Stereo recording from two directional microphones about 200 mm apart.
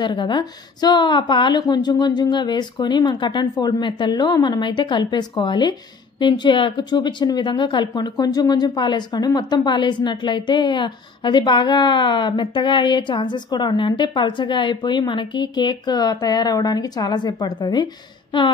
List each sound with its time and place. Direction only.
0.0 s a woman's voice: 25° left (ahead or behind)